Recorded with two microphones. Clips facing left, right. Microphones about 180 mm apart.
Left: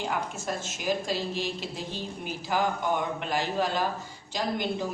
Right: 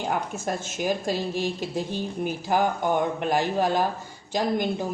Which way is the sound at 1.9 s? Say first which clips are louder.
Right 7 dB; 50° right (ahead or behind).